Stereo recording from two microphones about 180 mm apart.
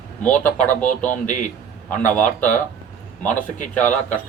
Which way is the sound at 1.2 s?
45° left (ahead or behind).